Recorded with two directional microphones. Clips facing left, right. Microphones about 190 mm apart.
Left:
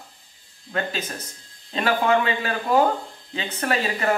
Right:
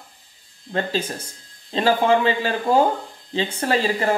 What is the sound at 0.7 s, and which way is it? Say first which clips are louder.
Speech: right 4 dB; 30° right (ahead or behind).